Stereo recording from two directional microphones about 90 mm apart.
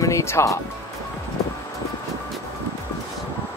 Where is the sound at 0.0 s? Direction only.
30° left (ahead or behind).